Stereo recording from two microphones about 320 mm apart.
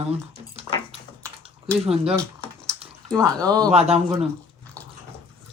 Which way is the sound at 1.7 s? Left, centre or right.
Centre.